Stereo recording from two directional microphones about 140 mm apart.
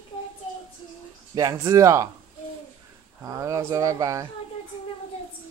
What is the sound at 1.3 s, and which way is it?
Speech, 25° right (ahead or behind).